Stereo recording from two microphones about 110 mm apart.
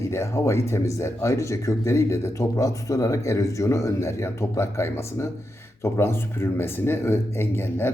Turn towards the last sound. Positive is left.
turn(degrees=20)  # may be behind; listen again after turning